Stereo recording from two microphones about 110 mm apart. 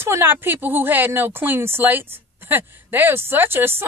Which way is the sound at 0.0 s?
20° right (ahead or behind).